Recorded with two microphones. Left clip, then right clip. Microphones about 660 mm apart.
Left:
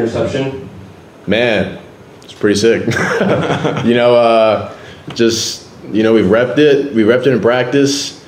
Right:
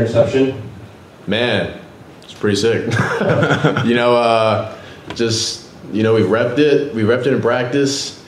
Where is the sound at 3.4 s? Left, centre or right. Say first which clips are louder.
Right 1 dB; right.